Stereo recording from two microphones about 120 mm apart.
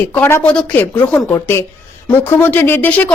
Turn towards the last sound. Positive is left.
turn(degrees=10)  # may be behind; listen again after turning